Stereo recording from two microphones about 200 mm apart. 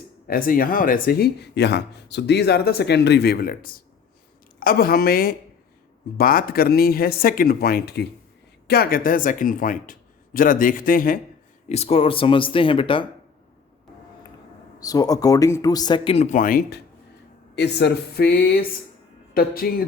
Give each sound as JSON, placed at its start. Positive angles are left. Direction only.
{"t": 0.3, "sound": "speech", "side_deg": 45}
{"t": 11.7, "sound": "speech", "side_deg": 30}
{"t": 14.8, "sound": "speech", "side_deg": 20}